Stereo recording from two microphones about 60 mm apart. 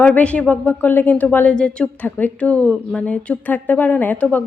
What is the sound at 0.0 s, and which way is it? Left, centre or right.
Speech, left.